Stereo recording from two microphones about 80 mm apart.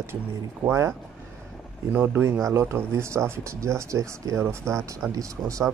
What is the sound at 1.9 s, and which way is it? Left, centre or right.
Speech, right.